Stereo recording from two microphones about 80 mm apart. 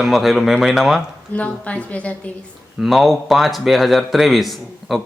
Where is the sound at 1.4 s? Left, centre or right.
Centre.